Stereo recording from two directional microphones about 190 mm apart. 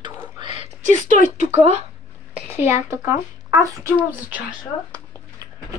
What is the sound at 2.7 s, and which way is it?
Speech, 15° right (ahead or behind).